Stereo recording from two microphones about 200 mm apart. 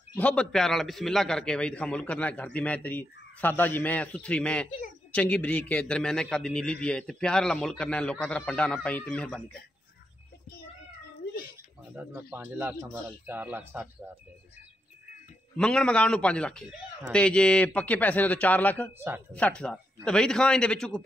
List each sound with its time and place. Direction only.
0.1 s a man's voice: 5° left (ahead or behind)
11.2 s cat: 55° left (ahead or behind)
11.9 s speech: 10° right (ahead or behind)
15.5 s a man's voice: 5° left (ahead or behind)
18.9 s speech: 10° right (ahead or behind)
19.3 s a man's voice: 5° left (ahead or behind)